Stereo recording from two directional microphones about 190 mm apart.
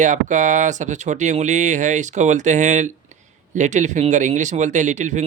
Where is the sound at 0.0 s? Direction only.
40° right (ahead or behind).